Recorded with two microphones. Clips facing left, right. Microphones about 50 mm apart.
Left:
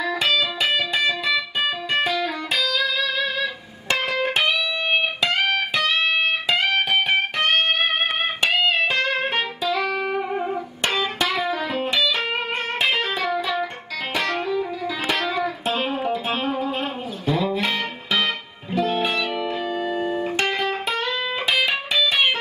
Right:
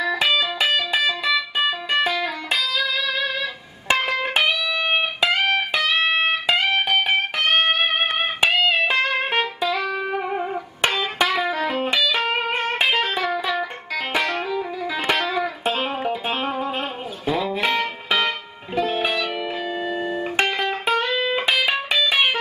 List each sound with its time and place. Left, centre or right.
0.0 s music: centre
6.0 s music: centre
6.5 s music: centre